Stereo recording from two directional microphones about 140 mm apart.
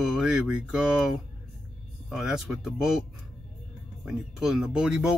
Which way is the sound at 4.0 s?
5° right (ahead or behind).